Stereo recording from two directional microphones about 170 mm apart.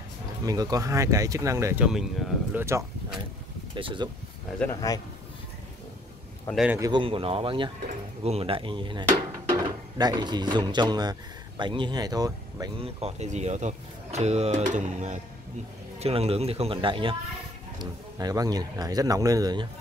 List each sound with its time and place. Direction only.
0.5 s speech: 20° right (ahead or behind)
1.9 s speech: centre (ahead or behind)
3.7 s speech: 30° right (ahead or behind)
4.6 s a man's voice: 5° left (ahead or behind)
6.5 s speech: 5° right (ahead or behind)
6.8 s speech: 30° right (ahead or behind)
12.8 s speech: 40° right (ahead or behind)